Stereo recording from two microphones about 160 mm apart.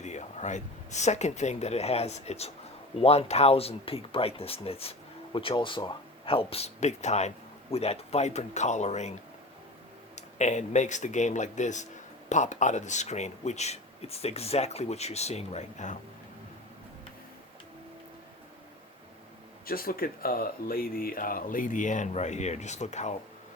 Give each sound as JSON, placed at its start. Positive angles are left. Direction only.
{"t": 0.0, "sound": "speech", "side_deg": 45}
{"t": 10.2, "sound": "speech", "side_deg": 45}
{"t": 19.6, "sound": "speech", "side_deg": 65}